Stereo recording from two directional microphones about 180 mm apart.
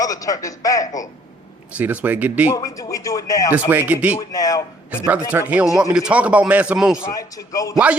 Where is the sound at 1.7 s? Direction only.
10° right (ahead or behind).